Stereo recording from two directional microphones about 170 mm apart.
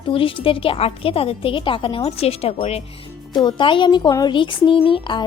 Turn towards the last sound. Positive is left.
turn(degrees=30)  # may be behind; listen again after turning